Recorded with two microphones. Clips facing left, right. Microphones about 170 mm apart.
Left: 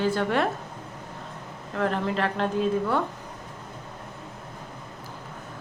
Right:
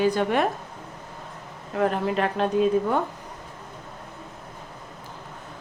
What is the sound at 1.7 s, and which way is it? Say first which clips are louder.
A woman's voice: right 3 dB; 15° right (ahead or behind).